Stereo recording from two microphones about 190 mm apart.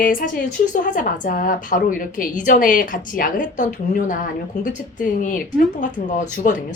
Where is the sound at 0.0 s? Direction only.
45° left (ahead or behind).